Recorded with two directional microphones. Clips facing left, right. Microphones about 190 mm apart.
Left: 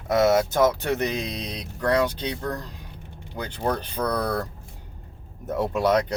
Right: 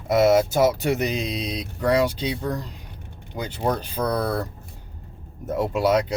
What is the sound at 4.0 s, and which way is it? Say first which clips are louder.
Speech: right 2 dB; 25° right (ahead or behind).